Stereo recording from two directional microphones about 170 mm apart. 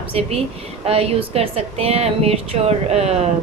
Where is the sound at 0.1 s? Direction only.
35° right (ahead or behind).